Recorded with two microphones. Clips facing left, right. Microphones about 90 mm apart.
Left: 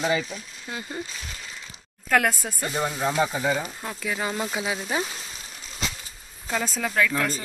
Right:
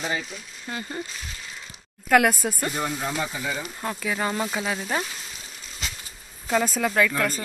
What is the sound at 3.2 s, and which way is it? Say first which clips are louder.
Speech: left 6 dB; 30° left (ahead or behind).